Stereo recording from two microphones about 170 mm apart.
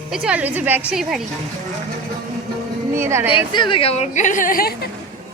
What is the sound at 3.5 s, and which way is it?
A woman's voice, 25° left (ahead or behind).